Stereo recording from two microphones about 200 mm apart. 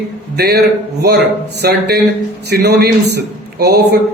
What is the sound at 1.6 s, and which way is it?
Speech, 50° right (ahead or behind).